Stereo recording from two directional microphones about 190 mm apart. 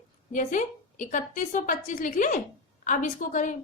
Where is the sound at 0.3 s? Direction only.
40° left (ahead or behind).